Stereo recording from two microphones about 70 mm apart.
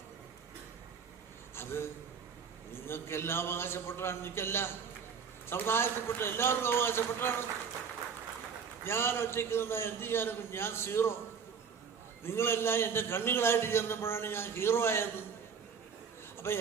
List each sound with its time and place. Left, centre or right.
1.5 s a man's voice: left
8.8 s a man's voice: left
12.2 s a man's voice: left
16.4 s a man's voice: left